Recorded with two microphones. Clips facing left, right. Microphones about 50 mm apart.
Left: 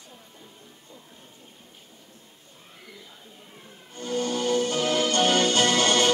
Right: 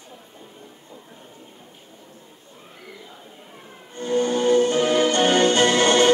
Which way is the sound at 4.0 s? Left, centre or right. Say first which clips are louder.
Right 6 dB; right.